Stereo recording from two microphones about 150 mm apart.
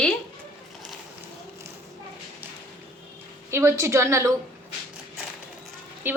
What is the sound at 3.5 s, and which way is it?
Speech, 15° right (ahead or behind).